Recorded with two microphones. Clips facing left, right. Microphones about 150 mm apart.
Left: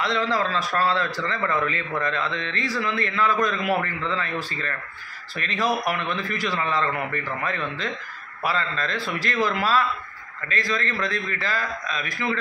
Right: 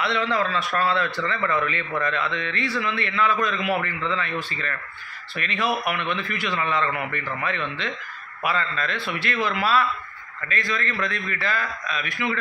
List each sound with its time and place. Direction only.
0.0 s a man's voice: 40° left (ahead or behind)